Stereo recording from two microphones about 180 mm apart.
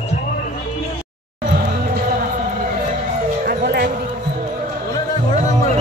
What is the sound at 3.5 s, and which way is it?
Music, 65° right (ahead or behind).